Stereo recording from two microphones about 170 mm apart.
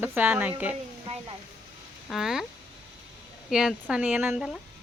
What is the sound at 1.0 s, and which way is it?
Speech, 35° right (ahead or behind).